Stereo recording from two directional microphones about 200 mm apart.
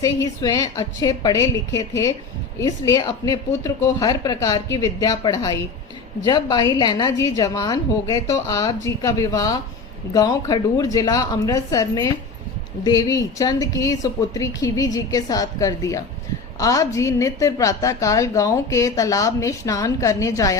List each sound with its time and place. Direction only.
0.0 s a woman's voice: 20° left (ahead or behind)